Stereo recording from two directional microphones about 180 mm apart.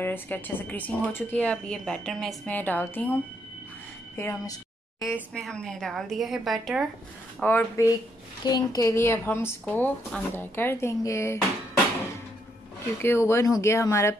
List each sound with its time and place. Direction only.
0.0 s speech: 10° left (ahead or behind)
4.2 s a woman's voice: 15° left (ahead or behind)
7.3 s speech: 10° left (ahead or behind)
13.0 s speech: 15° left (ahead or behind)